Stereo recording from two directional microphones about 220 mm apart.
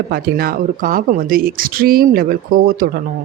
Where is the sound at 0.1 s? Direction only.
45° right (ahead or behind).